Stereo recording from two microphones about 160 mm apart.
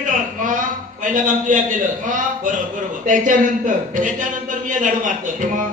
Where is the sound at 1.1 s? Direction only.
55° right (ahead or behind).